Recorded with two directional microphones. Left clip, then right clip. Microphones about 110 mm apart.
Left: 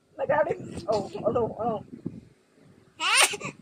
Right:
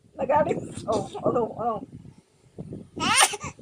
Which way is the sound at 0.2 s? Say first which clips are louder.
Right 2 dB; 35° right (ahead or behind).